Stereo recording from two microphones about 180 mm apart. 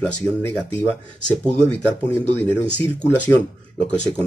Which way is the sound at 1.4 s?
5° left (ahead or behind).